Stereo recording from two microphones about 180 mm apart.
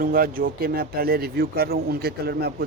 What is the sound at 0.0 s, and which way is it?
A man's voice, 55° right (ahead or behind).